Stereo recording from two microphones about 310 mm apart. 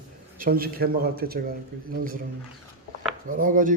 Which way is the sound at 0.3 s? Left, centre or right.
Right.